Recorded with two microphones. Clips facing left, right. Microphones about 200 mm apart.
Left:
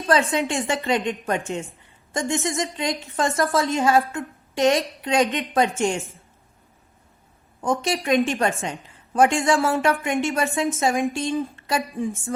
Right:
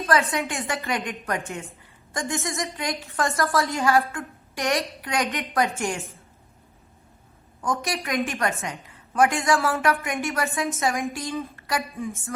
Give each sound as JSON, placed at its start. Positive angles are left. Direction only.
{"t": 0.1, "sound": "a woman's voice", "side_deg": 25}
{"t": 7.6, "sound": "a woman's voice", "side_deg": 25}